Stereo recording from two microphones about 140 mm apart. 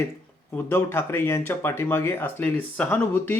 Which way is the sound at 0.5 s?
15° left (ahead or behind).